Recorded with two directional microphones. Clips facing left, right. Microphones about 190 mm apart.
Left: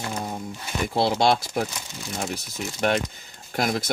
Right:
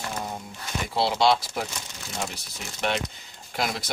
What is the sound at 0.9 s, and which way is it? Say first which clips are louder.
Speech: left 1 dB; 50° left (ahead or behind).